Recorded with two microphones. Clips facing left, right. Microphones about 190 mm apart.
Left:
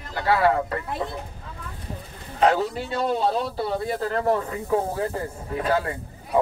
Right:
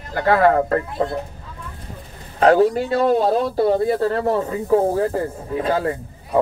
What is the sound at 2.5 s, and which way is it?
A man's voice, 50° right (ahead or behind).